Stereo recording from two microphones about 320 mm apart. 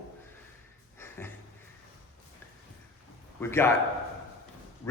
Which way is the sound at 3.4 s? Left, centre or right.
Centre.